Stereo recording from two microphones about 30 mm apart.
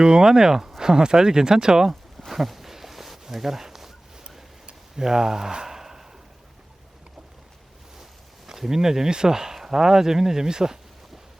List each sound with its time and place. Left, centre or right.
0.0 s speech: right
2.3 s a sound: centre
4.9 s speech: centre
8.4 s speech: centre